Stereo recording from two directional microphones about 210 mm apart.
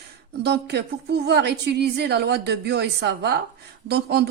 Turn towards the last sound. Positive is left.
turn(degrees=-50)  # may be behind; listen again after turning